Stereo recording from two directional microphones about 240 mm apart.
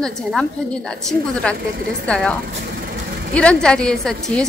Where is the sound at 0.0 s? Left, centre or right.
Centre.